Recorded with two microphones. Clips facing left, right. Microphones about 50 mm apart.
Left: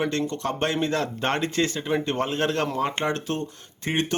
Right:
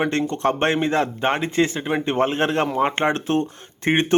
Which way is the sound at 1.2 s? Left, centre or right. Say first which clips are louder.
Right 4 dB; centre.